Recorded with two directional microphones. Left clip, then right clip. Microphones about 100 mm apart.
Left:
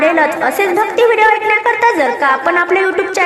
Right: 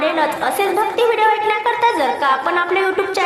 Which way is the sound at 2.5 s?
20° left (ahead or behind).